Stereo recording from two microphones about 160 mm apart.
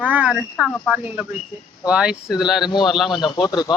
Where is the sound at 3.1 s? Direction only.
25° left (ahead or behind).